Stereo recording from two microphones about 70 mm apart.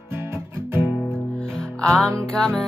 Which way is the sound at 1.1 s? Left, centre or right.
Centre.